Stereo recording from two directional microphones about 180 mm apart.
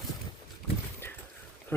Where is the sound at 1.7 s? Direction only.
10° left (ahead or behind).